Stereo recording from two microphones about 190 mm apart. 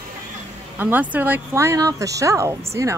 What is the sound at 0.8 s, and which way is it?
Speech, 10° right (ahead or behind).